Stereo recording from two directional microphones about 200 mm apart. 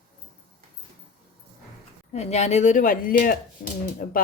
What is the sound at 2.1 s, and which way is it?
A woman's voice, 35° left (ahead or behind).